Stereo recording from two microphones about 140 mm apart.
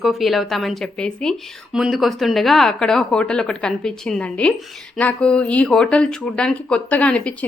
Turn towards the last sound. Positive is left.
turn(degrees=10)  # may be behind; listen again after turning